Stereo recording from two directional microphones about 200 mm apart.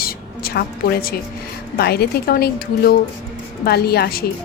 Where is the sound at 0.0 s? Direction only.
50° left (ahead or behind).